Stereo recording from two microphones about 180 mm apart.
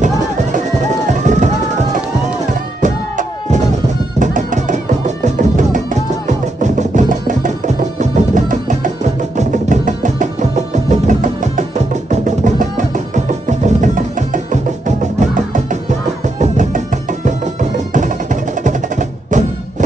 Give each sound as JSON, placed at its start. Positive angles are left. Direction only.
{"t": 1.2, "sound": "music", "side_deg": -45}
{"t": 2.8, "sound": "music", "side_deg": -45}